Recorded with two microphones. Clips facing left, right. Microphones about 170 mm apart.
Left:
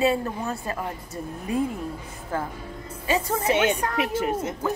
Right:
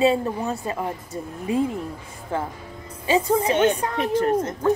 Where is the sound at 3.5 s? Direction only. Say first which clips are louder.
Right 2 dB; 10° left (ahead or behind).